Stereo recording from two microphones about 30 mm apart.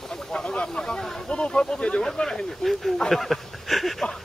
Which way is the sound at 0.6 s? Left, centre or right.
Left.